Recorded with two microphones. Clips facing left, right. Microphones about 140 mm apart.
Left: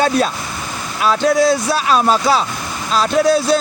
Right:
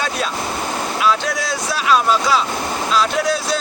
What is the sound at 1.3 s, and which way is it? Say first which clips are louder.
Speech: left 9 dB; 30° left (ahead or behind).